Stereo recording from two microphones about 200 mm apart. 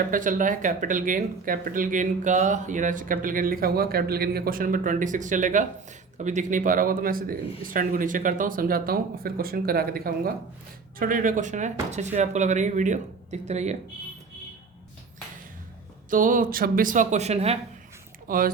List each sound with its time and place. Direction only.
0.1 s speech: 40° right (ahead or behind)
16.0 s speech: 40° right (ahead or behind)
18.3 s speech: 45° right (ahead or behind)